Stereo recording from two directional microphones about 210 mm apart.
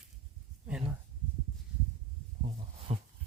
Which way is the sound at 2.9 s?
30° right (ahead or behind).